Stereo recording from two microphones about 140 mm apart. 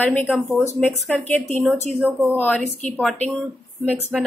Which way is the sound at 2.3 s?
10° left (ahead or behind).